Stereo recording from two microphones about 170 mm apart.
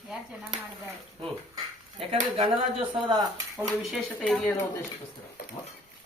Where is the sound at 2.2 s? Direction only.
40° right (ahead or behind).